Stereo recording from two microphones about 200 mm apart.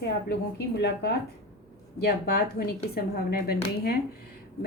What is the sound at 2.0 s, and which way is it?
Speech, 50° left (ahead or behind).